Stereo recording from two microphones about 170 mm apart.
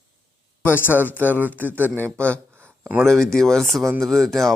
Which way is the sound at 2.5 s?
15° right (ahead or behind).